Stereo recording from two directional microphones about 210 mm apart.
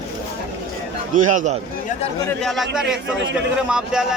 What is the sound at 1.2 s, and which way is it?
Speech, 35° right (ahead or behind).